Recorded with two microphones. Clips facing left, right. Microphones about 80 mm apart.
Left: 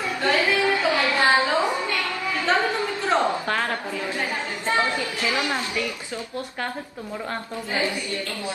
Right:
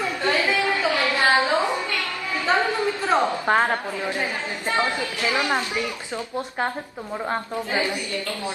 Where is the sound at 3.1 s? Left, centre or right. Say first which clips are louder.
Right 2 dB; right.